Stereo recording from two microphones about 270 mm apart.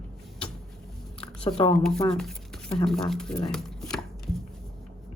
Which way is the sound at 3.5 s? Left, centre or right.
Centre.